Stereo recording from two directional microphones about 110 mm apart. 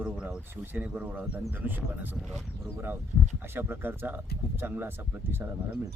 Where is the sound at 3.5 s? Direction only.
20° right (ahead or behind).